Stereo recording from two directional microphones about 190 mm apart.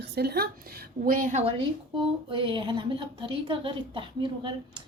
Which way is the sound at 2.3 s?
25° right (ahead or behind).